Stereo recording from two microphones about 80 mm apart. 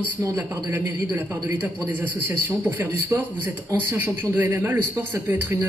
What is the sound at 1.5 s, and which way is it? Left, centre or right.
A man's voice, right.